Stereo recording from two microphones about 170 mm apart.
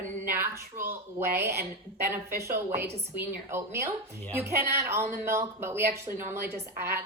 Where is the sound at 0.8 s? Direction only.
15° right (ahead or behind).